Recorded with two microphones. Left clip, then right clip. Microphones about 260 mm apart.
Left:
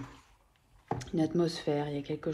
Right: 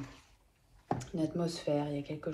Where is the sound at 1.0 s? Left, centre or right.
Left.